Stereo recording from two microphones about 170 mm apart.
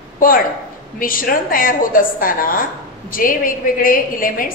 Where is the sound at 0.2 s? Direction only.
55° left (ahead or behind).